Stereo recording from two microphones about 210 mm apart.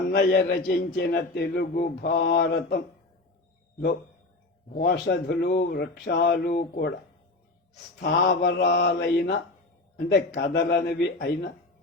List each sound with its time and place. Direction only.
0.1 s a man's voice: 50° left (ahead or behind)
4.8 s a man's voice: 50° left (ahead or behind)
8.0 s a man's voice: 45° left (ahead or behind)